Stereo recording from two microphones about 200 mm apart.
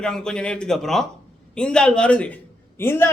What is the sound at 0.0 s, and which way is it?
A man's voice, 5° left (ahead or behind).